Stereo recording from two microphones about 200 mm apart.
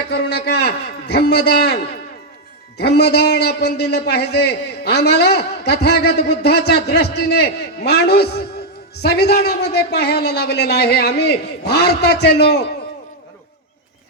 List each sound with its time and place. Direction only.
0.1 s a man's voice: 55° left (ahead or behind)